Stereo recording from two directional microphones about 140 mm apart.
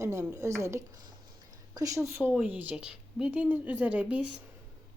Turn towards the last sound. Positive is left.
turn(degrees=-10)  # may be behind; listen again after turning